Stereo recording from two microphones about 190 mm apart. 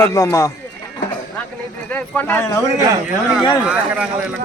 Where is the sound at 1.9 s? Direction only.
10° left (ahead or behind).